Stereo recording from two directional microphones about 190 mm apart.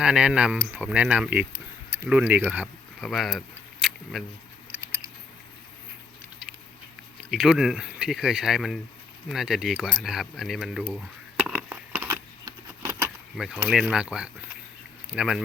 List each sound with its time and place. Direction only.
0.0 s speech: 5° right (ahead or behind)
4.7 s a sound: 70° right (ahead or behind)
6.4 s patter: 5° right (ahead or behind)
7.3 s speech: 5° right (ahead or behind)
11.4 s a sound: 5° right (ahead or behind)
13.3 s speech: centre (ahead or behind)